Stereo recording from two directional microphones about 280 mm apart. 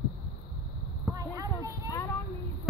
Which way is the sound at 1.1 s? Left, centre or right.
Centre.